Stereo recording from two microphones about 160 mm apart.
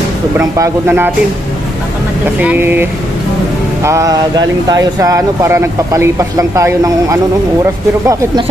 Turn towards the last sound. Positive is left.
turn(degrees=-20)  # may be behind; listen again after turning